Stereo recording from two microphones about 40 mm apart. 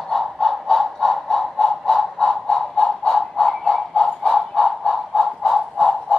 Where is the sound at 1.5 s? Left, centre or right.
Centre.